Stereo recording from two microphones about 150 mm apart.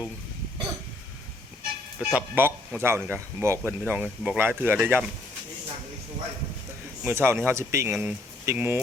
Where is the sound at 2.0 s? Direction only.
10° right (ahead or behind).